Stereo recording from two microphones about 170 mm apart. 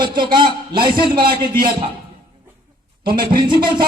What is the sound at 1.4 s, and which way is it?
Speech, 60° right (ahead or behind).